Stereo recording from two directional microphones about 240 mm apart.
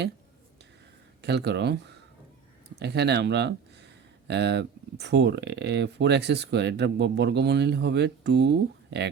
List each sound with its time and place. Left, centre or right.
1.2 s speech: right